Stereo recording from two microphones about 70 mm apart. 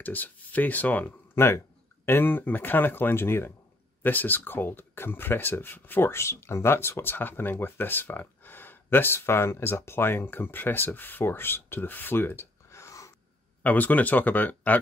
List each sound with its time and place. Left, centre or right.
0.0 s speech: left
1.3 s speech: left
13.6 s speech: left